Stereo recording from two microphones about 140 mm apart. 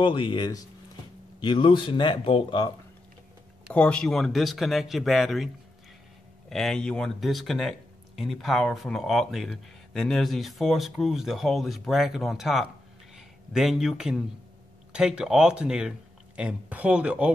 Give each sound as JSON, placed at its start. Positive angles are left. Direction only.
{"t": 0.0, "sound": "speech", "side_deg": 35}
{"t": 3.7, "sound": "speech", "side_deg": 5}
{"t": 6.5, "sound": "speech", "side_deg": 5}